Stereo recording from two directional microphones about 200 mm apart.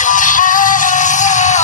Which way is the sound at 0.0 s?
40° left (ahead or behind).